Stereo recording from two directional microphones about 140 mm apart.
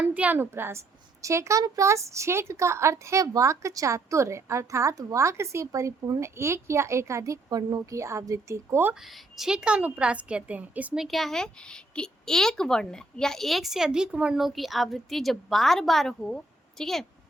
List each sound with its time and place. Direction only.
0.0 s a woman's voice: 10° right (ahead or behind)
9.4 s a woman's voice: 5° right (ahead or behind)